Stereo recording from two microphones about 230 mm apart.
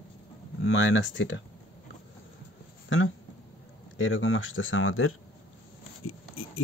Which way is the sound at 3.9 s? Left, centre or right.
Left.